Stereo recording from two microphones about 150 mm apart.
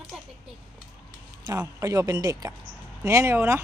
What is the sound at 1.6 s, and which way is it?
Speech, 20° right (ahead or behind).